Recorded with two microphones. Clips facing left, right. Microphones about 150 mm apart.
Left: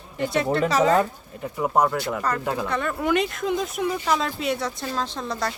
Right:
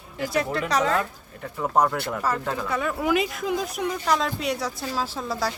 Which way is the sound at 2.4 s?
15° left (ahead or behind).